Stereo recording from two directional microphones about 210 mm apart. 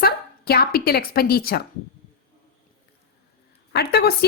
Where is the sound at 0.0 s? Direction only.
50° left (ahead or behind).